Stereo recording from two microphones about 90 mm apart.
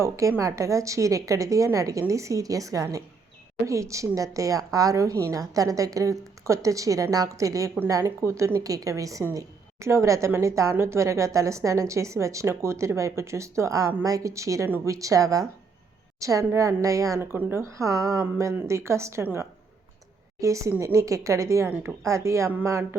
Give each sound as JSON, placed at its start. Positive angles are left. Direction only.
{"t": 0.0, "sound": "a woman's voice", "side_deg": -35}
{"t": 17.2, "sound": "a woman's voice", "side_deg": -25}